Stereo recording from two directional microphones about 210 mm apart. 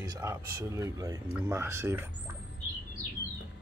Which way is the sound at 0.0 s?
15° right (ahead or behind).